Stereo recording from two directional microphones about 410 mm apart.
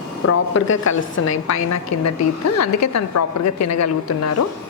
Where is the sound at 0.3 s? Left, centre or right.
Left.